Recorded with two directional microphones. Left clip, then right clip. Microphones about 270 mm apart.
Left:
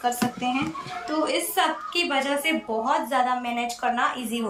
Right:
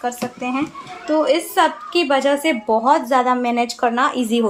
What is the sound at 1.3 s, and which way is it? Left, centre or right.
A woman's voice, centre.